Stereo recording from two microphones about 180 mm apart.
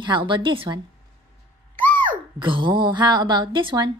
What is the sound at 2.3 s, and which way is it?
A woman's voice, 25° right (ahead or behind).